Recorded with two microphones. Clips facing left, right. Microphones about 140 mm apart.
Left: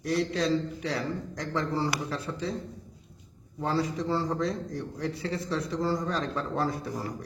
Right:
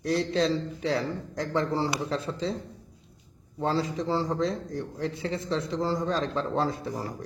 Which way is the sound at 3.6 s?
25° right (ahead or behind).